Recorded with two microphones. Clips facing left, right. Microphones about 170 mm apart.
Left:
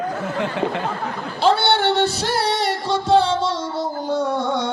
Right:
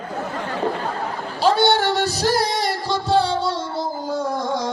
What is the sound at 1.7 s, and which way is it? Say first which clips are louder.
Music: left 1 dB; 40° right (ahead or behind).